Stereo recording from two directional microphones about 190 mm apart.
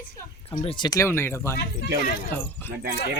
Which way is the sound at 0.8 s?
20° left (ahead or behind).